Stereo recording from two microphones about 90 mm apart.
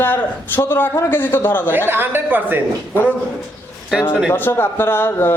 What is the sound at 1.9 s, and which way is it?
Speech, 25° right (ahead or behind).